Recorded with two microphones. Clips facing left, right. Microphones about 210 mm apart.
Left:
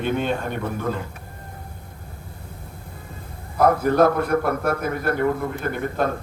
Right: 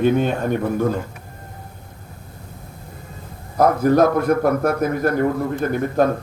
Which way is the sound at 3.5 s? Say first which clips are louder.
Right 2 dB; 45° right (ahead or behind).